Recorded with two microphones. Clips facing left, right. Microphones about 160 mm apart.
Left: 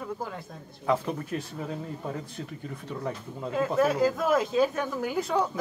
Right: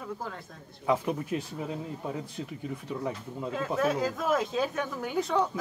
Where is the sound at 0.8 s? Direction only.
10° right (ahead or behind).